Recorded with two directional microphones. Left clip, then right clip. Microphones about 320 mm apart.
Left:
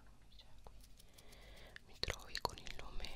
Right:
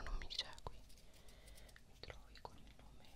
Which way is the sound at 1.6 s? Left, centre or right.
Left.